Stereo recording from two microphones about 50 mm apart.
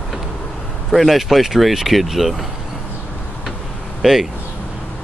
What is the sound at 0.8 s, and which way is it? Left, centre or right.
Speech, centre.